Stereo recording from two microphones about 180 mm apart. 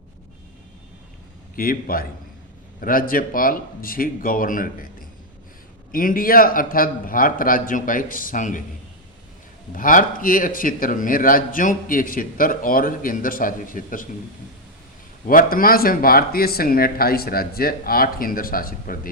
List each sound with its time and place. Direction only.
1.5 s speech: 55° left (ahead or behind)
5.9 s speech: 50° left (ahead or behind)
9.7 s speech: 50° left (ahead or behind)
15.3 s speech: 50° left (ahead or behind)